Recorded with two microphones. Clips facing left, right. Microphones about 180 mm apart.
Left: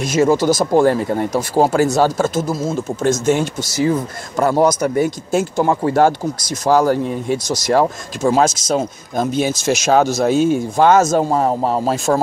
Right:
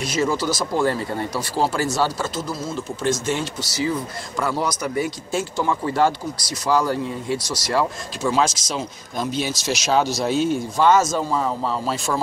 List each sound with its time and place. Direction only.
0.0 s speech: 45° left (ahead or behind)